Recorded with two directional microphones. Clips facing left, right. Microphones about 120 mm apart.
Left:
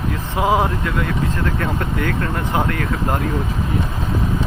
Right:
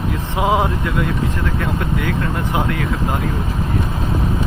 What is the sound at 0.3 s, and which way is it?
Speech, 20° right (ahead or behind).